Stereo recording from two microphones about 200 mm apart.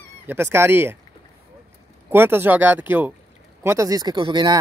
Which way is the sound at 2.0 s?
10° right (ahead or behind).